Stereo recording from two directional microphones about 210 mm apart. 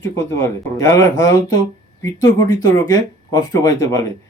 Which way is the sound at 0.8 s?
15° left (ahead or behind).